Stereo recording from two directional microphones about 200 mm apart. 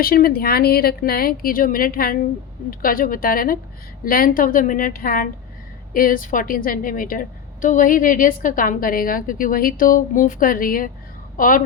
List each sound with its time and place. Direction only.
0.0 s a woman's voice: 50° left (ahead or behind)